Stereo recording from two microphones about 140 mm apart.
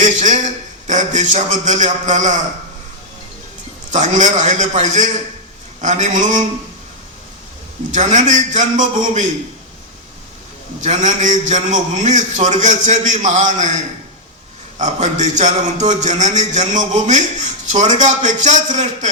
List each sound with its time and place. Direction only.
0.0 s a man's voice: 60° right (ahead or behind)
3.9 s a man's voice: 60° right (ahead or behind)
7.9 s a man's voice: 60° right (ahead or behind)
10.8 s a man's voice: 60° right (ahead or behind)
14.8 s a man's voice: 60° right (ahead or behind)